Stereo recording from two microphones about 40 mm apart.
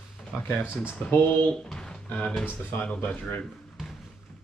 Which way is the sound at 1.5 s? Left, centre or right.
Centre.